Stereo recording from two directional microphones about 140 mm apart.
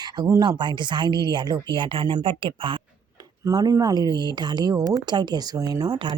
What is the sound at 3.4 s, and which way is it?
Speech, 25° right (ahead or behind).